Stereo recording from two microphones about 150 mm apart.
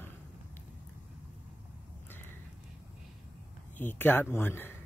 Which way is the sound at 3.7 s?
15° left (ahead or behind).